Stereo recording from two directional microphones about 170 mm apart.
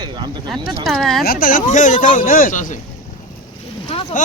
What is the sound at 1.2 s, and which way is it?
Speech, 55° left (ahead or behind).